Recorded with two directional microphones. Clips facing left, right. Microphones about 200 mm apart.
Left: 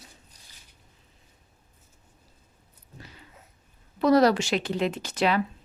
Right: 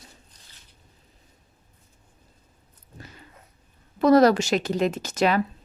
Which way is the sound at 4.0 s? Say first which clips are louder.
Right 3 dB; 45° right (ahead or behind).